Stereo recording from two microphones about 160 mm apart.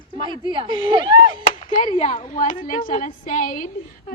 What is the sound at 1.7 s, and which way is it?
A woman's voice, 50° left (ahead or behind).